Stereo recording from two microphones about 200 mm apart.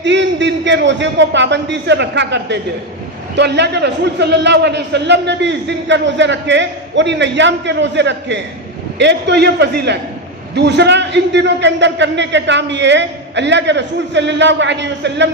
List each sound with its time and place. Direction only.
0.0 s a man's voice: 65° right (ahead or behind)